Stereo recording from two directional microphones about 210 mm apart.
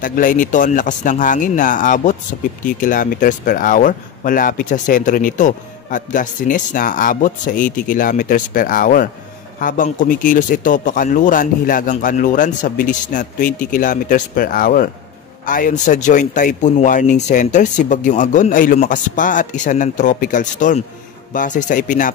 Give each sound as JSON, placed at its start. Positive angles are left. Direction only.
{"t": 0.0, "sound": "speech", "side_deg": 40}